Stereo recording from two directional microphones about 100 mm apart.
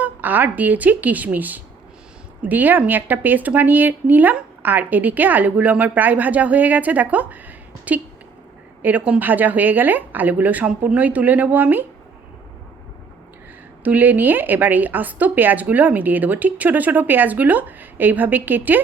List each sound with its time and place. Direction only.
0.0 s speech: 15° right (ahead or behind)
13.8 s speech: 15° right (ahead or behind)